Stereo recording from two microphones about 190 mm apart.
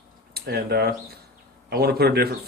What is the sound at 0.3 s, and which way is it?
Speech, 55° right (ahead or behind).